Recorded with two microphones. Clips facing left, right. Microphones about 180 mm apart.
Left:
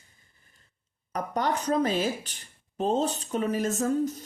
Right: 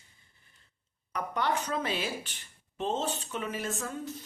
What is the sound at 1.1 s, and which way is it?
Speech, 40° left (ahead or behind).